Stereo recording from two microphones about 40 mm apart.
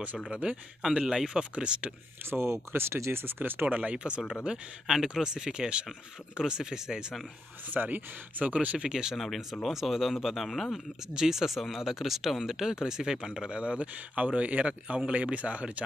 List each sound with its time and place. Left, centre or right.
0.3 s speech: right
0.8 s speech: centre
1.6 s speech: right
2.2 s speech: right
3.6 s speech: right
5.2 s speech: centre
7.7 s speech: right
8.7 s speech: centre
9.1 s speech: centre
11.1 s speech: centre
13.5 s speech: right